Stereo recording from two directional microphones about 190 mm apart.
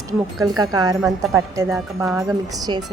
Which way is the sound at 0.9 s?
Centre (ahead or behind).